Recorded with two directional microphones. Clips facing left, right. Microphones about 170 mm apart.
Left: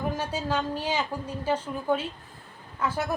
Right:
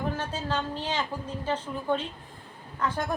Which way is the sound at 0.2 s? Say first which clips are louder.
Left 2 dB; 10° left (ahead or behind).